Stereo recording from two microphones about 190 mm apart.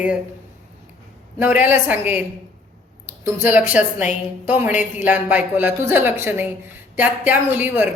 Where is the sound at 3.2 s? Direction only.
10° right (ahead or behind).